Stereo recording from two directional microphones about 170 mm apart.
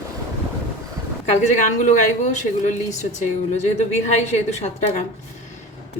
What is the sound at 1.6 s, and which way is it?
Speech, 45° left (ahead or behind).